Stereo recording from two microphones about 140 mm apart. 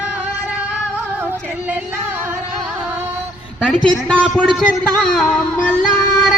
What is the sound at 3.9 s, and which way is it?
Speech, 5° left (ahead or behind).